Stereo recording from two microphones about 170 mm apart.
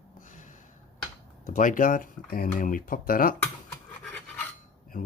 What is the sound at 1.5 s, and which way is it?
Speech, 50° left (ahead or behind).